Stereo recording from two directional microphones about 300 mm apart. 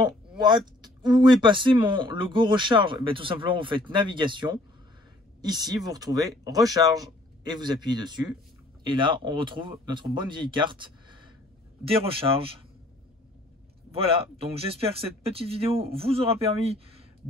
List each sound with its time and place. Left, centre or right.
0.0 s a sound: centre
1.2 s speech: centre
13.9 s speech: centre